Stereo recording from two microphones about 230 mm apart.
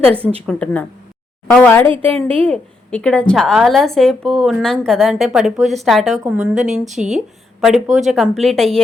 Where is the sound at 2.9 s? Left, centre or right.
Centre.